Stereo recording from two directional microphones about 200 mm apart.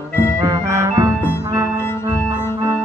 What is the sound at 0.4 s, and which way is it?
Music, 15° right (ahead or behind).